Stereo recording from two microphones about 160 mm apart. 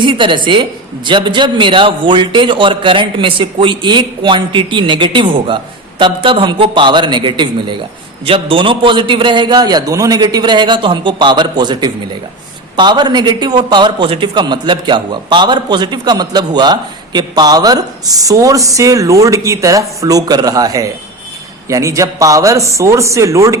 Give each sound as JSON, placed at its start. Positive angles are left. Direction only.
{"t": 0.0, "sound": "a woman's voice", "side_deg": -30}